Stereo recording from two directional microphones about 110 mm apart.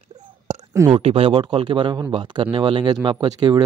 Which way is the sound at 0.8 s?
60° right (ahead or behind).